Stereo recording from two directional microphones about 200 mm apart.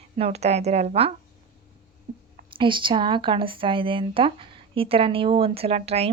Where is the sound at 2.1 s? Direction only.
40° right (ahead or behind).